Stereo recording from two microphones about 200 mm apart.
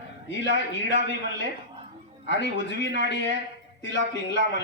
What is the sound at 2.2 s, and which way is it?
Speech, 65° left (ahead or behind).